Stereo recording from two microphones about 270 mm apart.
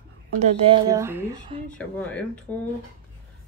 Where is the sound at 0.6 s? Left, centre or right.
Centre.